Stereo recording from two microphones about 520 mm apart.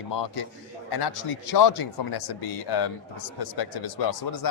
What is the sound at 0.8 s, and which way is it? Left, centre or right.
Speech, left.